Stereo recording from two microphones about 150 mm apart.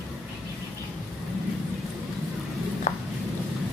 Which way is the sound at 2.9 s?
55° left (ahead or behind).